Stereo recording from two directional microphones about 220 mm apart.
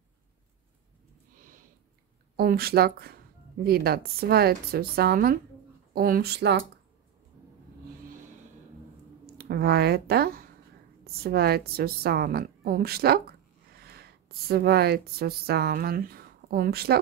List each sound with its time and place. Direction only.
2.3 s a woman's voice: 45° right (ahead or behind)
9.2 s a woman's voice: 45° right (ahead or behind)